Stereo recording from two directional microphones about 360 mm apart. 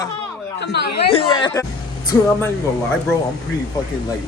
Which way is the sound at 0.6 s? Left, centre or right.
Left.